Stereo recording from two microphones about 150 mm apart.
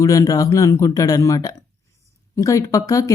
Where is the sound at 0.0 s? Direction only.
25° left (ahead or behind).